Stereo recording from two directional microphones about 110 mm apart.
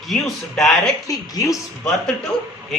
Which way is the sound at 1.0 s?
35° left (ahead or behind).